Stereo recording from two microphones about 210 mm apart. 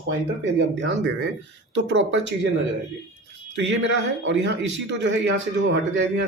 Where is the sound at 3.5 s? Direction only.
60° right (ahead or behind).